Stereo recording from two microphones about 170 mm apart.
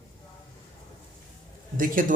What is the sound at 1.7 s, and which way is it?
Speech, 55° right (ahead or behind).